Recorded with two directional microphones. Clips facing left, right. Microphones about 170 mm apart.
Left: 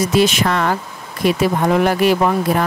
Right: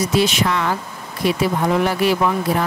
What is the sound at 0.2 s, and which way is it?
Speech, 50° left (ahead or behind).